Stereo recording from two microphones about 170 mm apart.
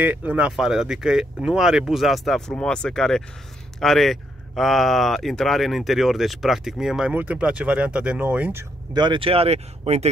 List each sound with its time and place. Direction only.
0.0 s speech: 10° right (ahead or behind)
8.9 s speech: 30° right (ahead or behind)